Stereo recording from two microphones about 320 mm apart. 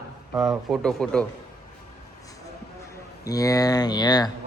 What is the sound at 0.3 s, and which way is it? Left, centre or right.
Speech, centre.